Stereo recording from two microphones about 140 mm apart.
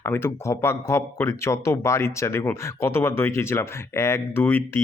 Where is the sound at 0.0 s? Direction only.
15° left (ahead or behind).